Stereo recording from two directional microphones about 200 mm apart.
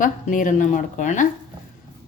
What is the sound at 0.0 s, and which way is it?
A woman's voice, 40° left (ahead or behind).